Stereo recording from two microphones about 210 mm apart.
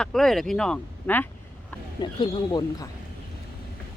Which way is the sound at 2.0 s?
20° left (ahead or behind).